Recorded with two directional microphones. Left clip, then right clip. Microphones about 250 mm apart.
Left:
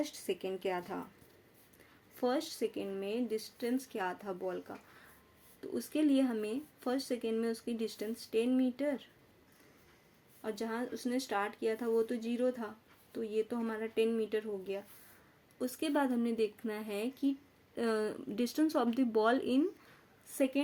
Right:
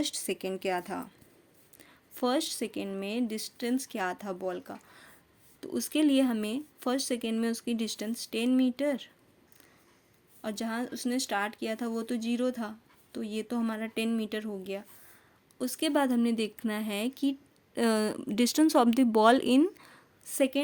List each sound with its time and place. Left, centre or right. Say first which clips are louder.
0.0 s speech: right 4 dB; right
2.1 s speech: right 5 dB; right
10.4 s speech: right 3 dB; right